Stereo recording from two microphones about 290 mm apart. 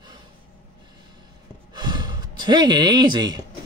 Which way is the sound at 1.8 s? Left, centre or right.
Centre.